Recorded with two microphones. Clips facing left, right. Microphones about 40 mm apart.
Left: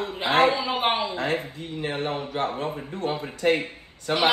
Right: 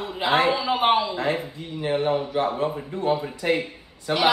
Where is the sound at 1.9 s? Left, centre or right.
Right.